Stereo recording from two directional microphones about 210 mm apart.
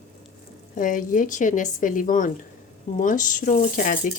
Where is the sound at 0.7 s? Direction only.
40° left (ahead or behind).